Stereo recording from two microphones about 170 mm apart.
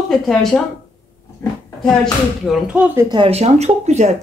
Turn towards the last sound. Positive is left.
turn(degrees=-40)  # may be behind; listen again after turning